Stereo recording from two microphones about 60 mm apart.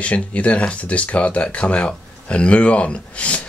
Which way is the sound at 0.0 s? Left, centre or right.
Left.